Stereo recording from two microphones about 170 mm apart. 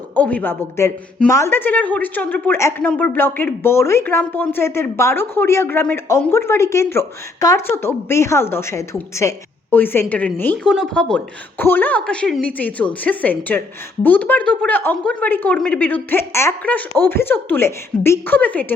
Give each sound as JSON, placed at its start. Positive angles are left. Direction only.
{"t": 0.2, "sound": "a woman's voice", "side_deg": 10}